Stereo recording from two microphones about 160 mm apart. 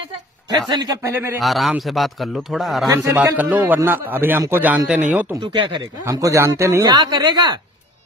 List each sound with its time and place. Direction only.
0.7 s speech: 25° right (ahead or behind)
1.0 s a man's voice: 15° right (ahead or behind)
1.4 s a man's voice: centre (ahead or behind)
2.9 s a man's voice: 15° right (ahead or behind)
5.3 s speech: 30° right (ahead or behind)